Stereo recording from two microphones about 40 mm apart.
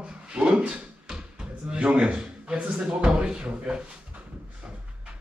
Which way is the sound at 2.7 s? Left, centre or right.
Centre.